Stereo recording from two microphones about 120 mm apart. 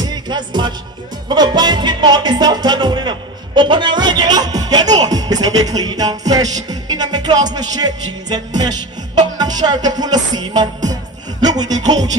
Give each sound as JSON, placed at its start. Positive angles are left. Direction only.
{"t": 0.0, "sound": "music", "side_deg": -35}
{"t": 1.3, "sound": "speech", "side_deg": -35}
{"t": 11.4, "sound": "music", "side_deg": -35}
{"t": 11.8, "sound": "speech", "side_deg": -35}